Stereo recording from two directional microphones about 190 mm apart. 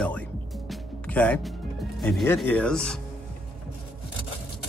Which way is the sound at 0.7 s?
5° left (ahead or behind).